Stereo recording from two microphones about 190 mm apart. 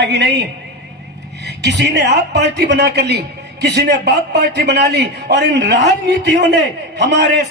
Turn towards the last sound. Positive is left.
turn(degrees=-65)  # may be behind; listen again after turning